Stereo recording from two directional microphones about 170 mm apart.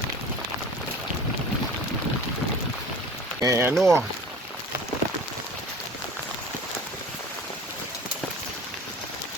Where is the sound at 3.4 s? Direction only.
20° right (ahead or behind).